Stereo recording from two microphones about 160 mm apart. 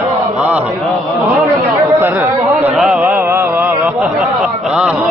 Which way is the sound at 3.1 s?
15° right (ahead or behind).